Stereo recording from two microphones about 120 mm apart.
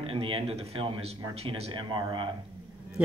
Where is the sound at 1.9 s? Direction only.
40° right (ahead or behind).